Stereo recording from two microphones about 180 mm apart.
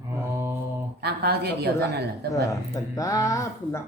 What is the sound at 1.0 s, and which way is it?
A woman's voice, 65° right (ahead or behind).